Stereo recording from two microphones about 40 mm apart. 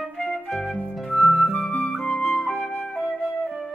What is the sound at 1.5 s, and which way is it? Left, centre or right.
Music, left.